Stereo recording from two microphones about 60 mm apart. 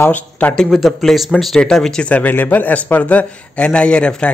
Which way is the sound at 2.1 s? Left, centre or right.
Left.